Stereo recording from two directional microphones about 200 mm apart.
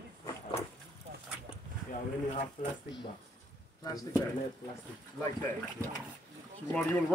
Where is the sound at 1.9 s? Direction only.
25° left (ahead or behind).